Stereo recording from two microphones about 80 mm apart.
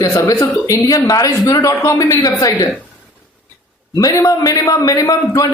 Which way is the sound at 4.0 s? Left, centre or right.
Left.